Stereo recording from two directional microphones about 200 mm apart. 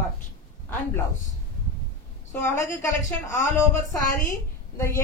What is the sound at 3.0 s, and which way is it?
Speech, 40° left (ahead or behind).